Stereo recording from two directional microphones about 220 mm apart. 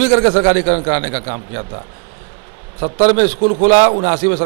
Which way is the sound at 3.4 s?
35° right (ahead or behind).